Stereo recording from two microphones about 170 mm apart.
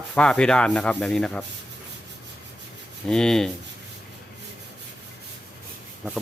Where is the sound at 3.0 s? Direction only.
5° left (ahead or behind).